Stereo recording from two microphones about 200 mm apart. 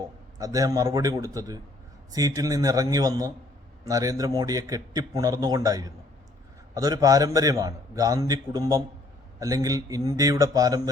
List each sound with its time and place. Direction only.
0.3 s a man's voice: 15° right (ahead or behind)